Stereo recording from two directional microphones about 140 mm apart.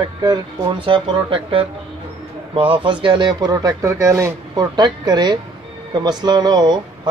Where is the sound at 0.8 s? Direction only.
40° right (ahead or behind).